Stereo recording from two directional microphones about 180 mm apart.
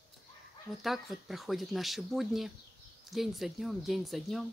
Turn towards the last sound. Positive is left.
turn(degrees=0)  # may be behind; listen again after turning